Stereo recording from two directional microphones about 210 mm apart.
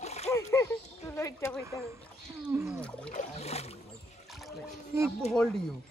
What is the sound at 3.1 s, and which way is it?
Boat, 30° left (ahead or behind).